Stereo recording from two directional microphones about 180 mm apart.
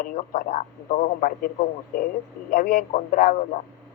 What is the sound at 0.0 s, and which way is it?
Speech, 40° left (ahead or behind).